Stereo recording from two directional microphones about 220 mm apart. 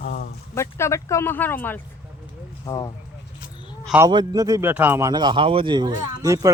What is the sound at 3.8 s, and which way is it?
Speech, 5° right (ahead or behind).